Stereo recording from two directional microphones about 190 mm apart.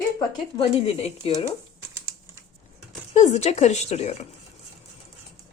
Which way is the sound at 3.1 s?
40° left (ahead or behind).